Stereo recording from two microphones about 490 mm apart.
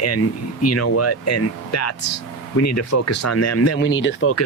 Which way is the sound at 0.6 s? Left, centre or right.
Left.